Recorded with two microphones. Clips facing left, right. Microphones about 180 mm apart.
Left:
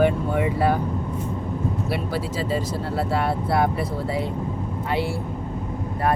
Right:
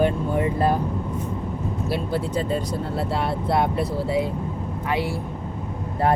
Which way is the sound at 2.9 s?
60° left (ahead or behind).